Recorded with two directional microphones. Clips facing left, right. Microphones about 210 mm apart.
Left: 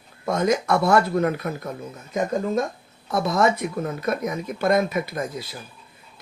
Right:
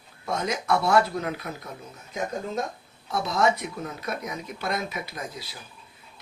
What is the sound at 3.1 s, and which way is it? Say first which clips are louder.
Speech: left 4 dB; 50° left (ahead or behind).